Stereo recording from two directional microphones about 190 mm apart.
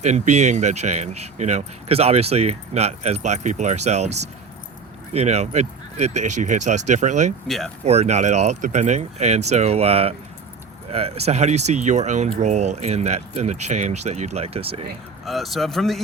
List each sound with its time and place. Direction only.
0.0 s speech: 35° right (ahead or behind)
7.4 s speech: centre (ahead or behind)
7.9 s speech: 35° right (ahead or behind)
15.2 s speech: centre (ahead or behind)